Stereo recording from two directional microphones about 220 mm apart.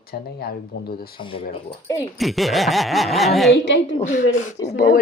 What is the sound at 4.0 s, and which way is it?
Speech, 35° left (ahead or behind).